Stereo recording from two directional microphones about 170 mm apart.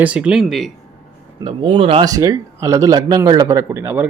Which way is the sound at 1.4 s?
30° right (ahead or behind).